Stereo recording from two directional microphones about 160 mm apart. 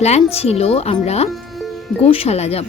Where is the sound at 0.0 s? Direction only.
40° left (ahead or behind).